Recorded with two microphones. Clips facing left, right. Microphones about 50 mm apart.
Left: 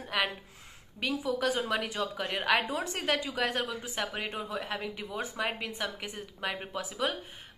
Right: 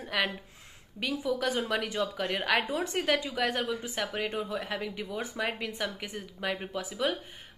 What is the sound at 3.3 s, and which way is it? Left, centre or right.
Speech, left.